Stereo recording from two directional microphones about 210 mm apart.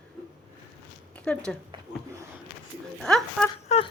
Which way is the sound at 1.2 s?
5° left (ahead or behind).